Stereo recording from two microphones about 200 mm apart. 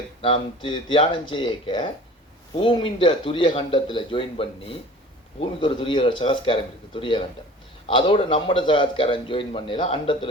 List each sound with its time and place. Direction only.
0.2 s a man's voice: 25° left (ahead or behind)